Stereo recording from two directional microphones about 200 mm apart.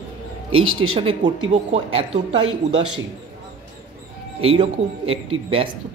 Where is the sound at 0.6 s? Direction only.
90° right.